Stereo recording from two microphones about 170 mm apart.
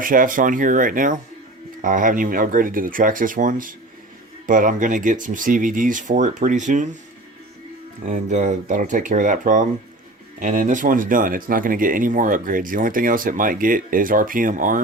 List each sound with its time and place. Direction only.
0.0 s speech: 55° right (ahead or behind)
8.0 s speech: 45° right (ahead or behind)